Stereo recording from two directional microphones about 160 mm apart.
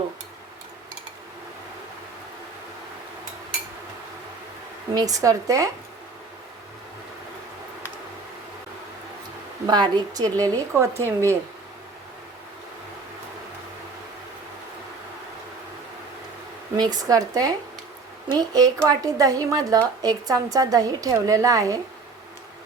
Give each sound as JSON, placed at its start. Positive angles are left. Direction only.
{"t": 4.9, "sound": "a woman's voice", "side_deg": -20}
{"t": 9.6, "sound": "a woman's voice", "side_deg": -25}
{"t": 16.7, "sound": "a woman's voice", "side_deg": -25}